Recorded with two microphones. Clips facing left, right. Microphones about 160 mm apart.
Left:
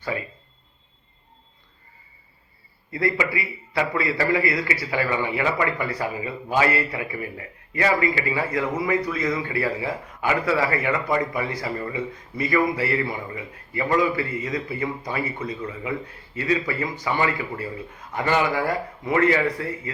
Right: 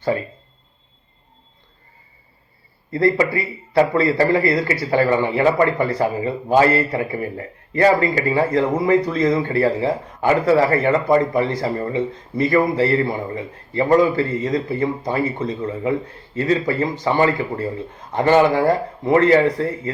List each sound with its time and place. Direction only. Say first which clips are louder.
2.9 s a man's voice: right 7 dB; 35° right (ahead or behind)